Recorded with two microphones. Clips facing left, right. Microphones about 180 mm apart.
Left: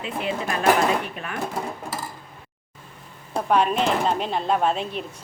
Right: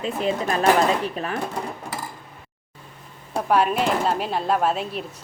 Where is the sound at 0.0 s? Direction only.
40° right (ahead or behind).